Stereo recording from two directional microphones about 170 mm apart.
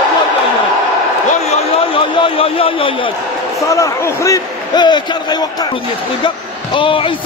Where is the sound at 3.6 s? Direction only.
20° left (ahead or behind).